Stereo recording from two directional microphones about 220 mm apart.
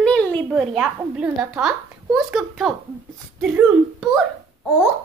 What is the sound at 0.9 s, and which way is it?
A woman's voice, 5° right (ahead or behind).